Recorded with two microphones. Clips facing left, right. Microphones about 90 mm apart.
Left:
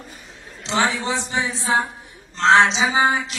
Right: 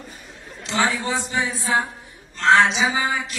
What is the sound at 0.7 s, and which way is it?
A man's voice, 20° left (ahead or behind).